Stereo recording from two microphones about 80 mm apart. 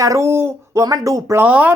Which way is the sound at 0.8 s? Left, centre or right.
Right.